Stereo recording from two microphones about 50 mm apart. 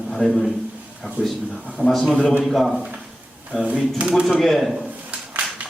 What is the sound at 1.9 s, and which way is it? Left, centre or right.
Speech, centre.